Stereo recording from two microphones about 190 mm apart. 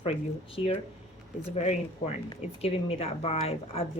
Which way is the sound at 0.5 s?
30° left (ahead or behind).